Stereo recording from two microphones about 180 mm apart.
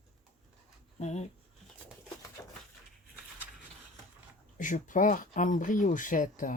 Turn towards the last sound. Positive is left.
turn(degrees=50)  # may be behind; listen again after turning